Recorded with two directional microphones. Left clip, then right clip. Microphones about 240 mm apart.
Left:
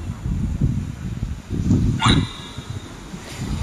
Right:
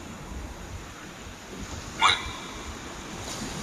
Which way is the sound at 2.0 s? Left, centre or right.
Centre.